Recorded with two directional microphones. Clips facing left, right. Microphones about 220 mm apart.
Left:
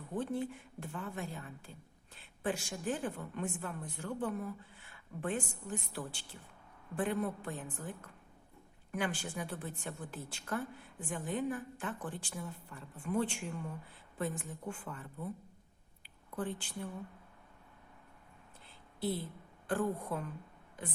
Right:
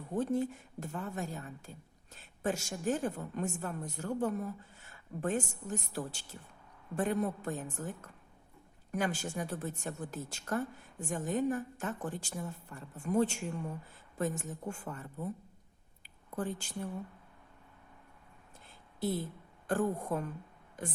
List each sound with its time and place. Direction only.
0.2 s a woman's voice: 40° right (ahead or behind)
16.0 s a sound: 45° right (ahead or behind)
18.9 s a woman's voice: 45° right (ahead or behind)